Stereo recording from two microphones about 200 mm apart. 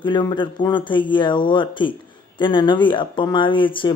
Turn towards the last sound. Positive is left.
turn(degrees=25)  # may be behind; listen again after turning